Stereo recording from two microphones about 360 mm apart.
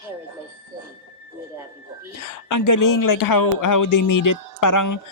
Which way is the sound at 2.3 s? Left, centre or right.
Left.